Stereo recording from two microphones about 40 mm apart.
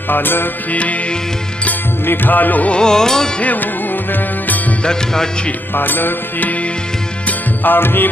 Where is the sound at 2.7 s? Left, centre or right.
Centre.